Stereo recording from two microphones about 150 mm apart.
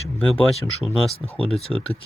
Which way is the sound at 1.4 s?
40° left (ahead or behind).